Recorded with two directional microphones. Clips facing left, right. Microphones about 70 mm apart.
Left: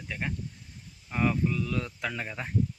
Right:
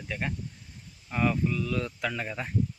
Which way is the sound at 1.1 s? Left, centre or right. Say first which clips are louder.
Even; centre.